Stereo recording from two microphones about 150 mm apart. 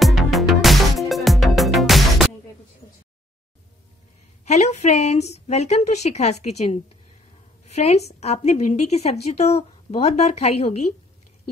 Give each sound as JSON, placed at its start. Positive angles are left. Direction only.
{"t": 0.0, "sound": "music", "side_deg": 0}
{"t": 4.5, "sound": "a woman's voice", "side_deg": 50}